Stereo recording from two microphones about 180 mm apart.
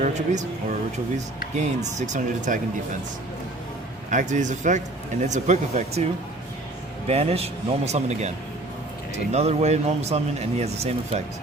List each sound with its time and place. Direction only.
0.0 s speech: 40° right (ahead or behind)
4.1 s speech: 45° right (ahead or behind)
7.1 s speech: 35° right (ahead or behind)
9.3 s speech: 35° right (ahead or behind)